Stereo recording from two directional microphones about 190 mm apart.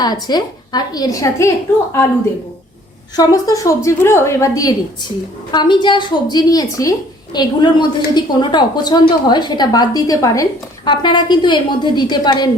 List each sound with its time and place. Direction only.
0.0 s a woman's voice: 20° left (ahead or behind)
3.2 s a woman's voice: 20° left (ahead or behind)